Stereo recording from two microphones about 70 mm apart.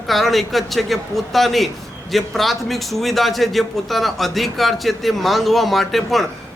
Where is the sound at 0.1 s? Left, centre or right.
Centre.